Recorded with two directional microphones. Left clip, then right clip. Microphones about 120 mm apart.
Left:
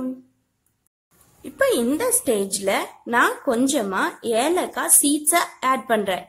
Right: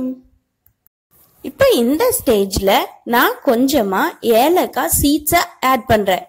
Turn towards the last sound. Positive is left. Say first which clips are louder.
# right 7 dB
turn(degrees=-40)  # may be behind; listen again after turning